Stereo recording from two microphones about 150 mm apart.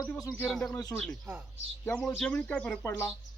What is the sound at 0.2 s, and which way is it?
Speech, 25° left (ahead or behind).